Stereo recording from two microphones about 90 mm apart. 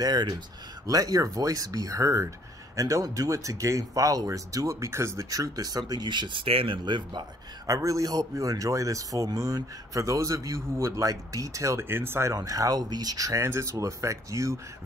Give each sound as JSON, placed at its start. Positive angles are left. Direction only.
{"t": 0.0, "sound": "speech", "side_deg": -50}
{"t": 6.8, "sound": "a man's voice", "side_deg": -55}
{"t": 7.6, "sound": "speech", "side_deg": -40}
{"t": 12.4, "sound": "speech", "side_deg": -40}